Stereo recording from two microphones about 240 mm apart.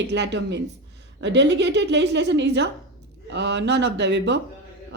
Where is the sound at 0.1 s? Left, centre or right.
Right.